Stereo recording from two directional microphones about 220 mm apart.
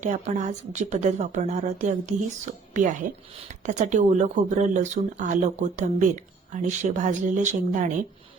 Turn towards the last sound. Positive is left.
turn(degrees=-35)  # may be behind; listen again after turning